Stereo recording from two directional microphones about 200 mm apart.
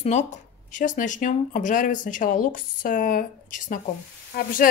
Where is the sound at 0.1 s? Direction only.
35° left (ahead or behind).